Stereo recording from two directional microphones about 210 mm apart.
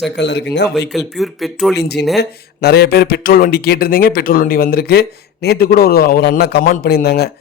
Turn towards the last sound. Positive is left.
turn(degrees=50)  # may be behind; listen again after turning